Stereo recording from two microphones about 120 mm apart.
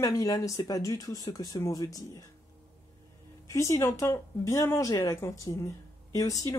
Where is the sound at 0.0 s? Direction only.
30° left (ahead or behind).